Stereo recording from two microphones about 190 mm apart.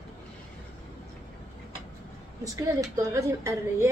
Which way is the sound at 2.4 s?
15° right (ahead or behind).